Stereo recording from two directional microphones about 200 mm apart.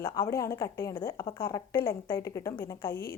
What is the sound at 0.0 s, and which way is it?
Speech, 15° left (ahead or behind).